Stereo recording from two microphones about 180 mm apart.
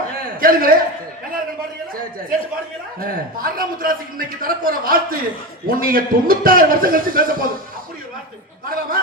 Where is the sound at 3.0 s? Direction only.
55° right (ahead or behind).